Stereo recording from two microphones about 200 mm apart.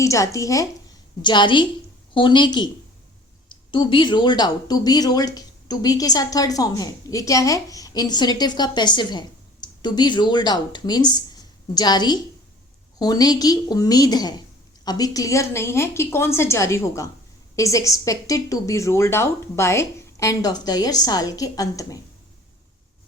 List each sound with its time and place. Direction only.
0.0 s speech: 15° left (ahead or behind)